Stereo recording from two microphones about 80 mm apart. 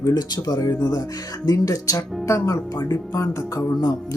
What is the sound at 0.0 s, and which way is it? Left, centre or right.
Speech, left.